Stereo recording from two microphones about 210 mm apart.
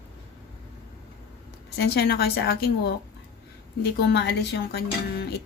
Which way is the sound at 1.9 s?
50° left (ahead or behind).